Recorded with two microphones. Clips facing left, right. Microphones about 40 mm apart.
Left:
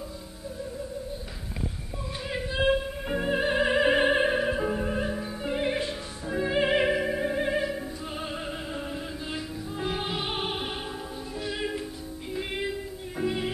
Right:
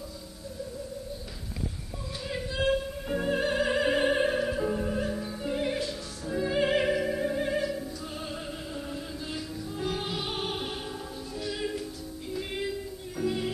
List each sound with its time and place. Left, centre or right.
2.2 s opera: left
9.3 s music: left